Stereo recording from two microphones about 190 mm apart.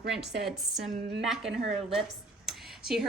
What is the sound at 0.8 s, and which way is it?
Speech, 40° right (ahead or behind).